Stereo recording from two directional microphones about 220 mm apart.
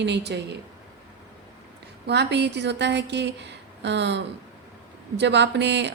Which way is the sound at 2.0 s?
50° right (ahead or behind).